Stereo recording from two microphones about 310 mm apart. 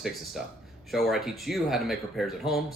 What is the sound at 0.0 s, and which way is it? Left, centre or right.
Speech, centre.